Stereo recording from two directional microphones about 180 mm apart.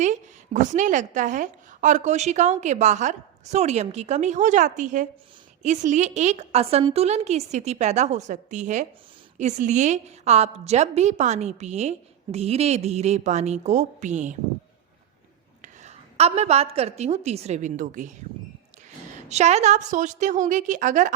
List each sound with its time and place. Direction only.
0.0 s a woman's voice: 40° right (ahead or behind)
15.6 s a woman's voice: 40° right (ahead or behind)
19.3 s a woman's voice: 40° right (ahead or behind)